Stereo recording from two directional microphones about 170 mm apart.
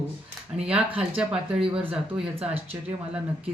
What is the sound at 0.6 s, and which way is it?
Speech, 5° right (ahead or behind).